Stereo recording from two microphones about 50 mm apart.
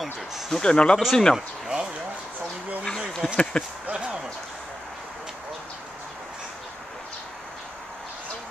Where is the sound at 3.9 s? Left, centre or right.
Centre.